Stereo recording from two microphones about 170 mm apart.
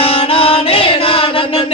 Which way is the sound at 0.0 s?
35° left (ahead or behind).